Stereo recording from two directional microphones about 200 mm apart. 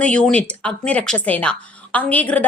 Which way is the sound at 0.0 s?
5° left (ahead or behind).